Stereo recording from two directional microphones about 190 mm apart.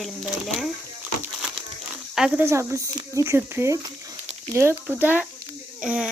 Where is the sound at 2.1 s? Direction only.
5° right (ahead or behind).